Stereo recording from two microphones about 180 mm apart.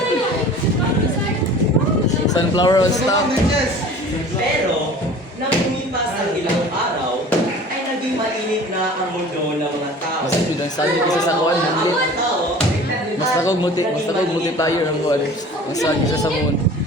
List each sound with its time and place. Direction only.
2.3 s speech: 20° left (ahead or behind)
13.4 s speech: 20° left (ahead or behind)